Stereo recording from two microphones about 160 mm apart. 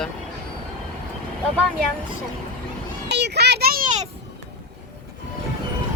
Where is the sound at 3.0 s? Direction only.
90° right; by 4.1 s 55° right (ahead or behind).